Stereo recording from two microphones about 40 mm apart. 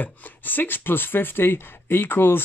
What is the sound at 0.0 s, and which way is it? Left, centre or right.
Speech, left.